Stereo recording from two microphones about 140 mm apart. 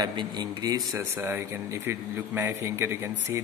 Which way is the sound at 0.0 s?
30° right (ahead or behind).